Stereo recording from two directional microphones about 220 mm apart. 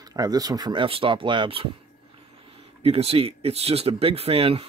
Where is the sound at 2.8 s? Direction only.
25° right (ahead or behind).